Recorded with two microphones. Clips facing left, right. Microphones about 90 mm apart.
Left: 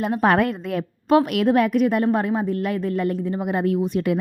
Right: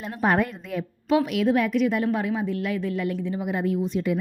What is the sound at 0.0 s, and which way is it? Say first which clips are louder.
A woman's voice: left 5 dB; 65° left (ahead or behind).